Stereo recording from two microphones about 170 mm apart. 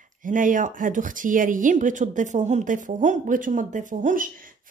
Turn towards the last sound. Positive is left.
turn(degrees=-55)  # may be behind; listen again after turning